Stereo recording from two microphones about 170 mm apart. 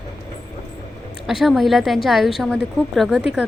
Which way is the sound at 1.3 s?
Centre (ahead or behind).